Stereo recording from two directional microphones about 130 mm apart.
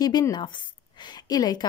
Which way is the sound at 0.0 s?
30° left (ahead or behind).